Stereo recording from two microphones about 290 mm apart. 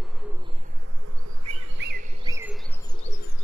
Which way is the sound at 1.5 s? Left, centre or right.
Right.